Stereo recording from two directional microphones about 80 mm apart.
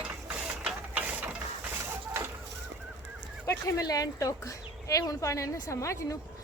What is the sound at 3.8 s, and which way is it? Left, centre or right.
Speech, left.